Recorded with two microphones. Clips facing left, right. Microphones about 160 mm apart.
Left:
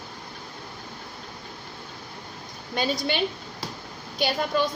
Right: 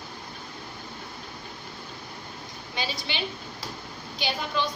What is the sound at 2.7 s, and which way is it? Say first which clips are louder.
A woman's voice: left 7 dB; 50° left (ahead or behind).